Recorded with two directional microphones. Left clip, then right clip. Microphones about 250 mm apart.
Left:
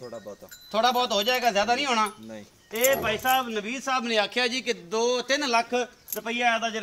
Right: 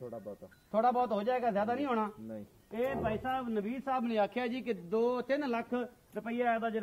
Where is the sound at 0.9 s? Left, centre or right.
Centre.